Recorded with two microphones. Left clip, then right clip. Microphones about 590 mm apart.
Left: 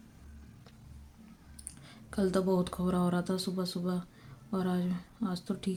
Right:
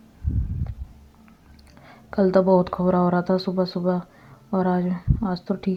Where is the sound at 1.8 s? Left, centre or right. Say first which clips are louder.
Right 12 dB; left.